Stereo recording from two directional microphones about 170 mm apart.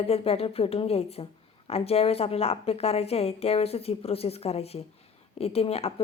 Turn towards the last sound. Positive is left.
turn(degrees=35)  # may be behind; listen again after turning